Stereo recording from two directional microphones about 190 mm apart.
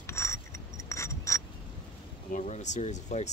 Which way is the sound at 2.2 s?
40° left (ahead or behind).